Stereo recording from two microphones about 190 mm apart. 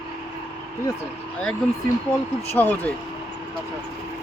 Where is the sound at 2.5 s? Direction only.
10° left (ahead or behind).